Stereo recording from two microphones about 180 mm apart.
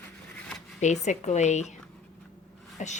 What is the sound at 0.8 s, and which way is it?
Speech, 40° left (ahead or behind).